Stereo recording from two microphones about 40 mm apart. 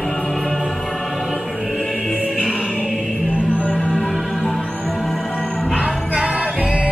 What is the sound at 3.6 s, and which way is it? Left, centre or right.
Music, left.